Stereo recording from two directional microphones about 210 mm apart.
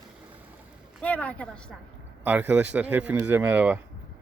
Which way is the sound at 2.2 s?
5° right (ahead or behind).